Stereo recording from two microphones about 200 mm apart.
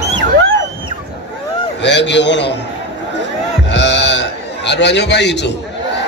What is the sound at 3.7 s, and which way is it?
Sheep, 65° left (ahead or behind).